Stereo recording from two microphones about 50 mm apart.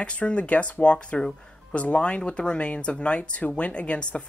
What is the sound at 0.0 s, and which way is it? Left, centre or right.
Speech, left.